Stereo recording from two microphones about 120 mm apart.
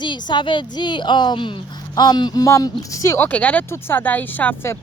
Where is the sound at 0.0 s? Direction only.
40° left (ahead or behind); by 3.2 s 25° left (ahead or behind).